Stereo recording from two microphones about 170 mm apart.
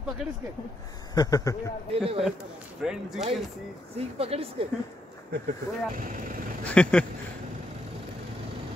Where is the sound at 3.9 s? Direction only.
35° right (ahead or behind).